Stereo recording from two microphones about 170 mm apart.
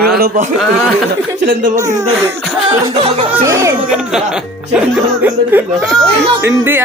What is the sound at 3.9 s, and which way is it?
Speech, 5° right (ahead or behind).